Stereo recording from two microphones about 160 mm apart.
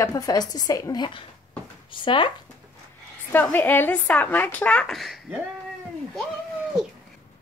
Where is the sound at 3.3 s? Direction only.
10° left (ahead or behind).